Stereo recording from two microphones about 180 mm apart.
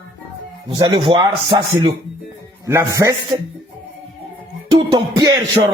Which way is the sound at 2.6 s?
15° right (ahead or behind).